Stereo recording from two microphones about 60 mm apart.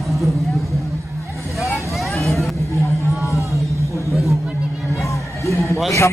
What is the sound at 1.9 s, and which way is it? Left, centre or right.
Vehicle, centre.